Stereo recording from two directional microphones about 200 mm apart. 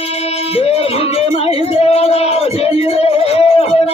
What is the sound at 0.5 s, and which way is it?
Music, 30° left (ahead or behind).